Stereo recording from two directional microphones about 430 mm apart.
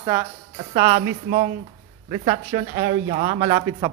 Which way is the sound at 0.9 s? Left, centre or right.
Right.